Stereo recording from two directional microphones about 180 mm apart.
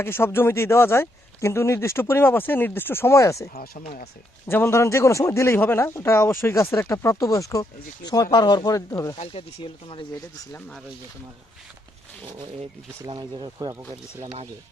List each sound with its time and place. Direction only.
0.0 s speech: 15° left (ahead or behind)
3.5 s speech: 55° left (ahead or behind)
4.4 s speech: 15° left (ahead or behind)
9.1 s speech: 30° left (ahead or behind)
13.1 s speech: 25° right (ahead or behind)